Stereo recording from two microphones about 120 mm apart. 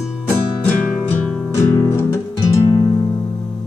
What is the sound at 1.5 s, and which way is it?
Music, 20° left (ahead or behind).